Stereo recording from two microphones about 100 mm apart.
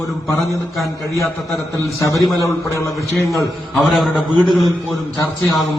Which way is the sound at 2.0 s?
30° left (ahead or behind).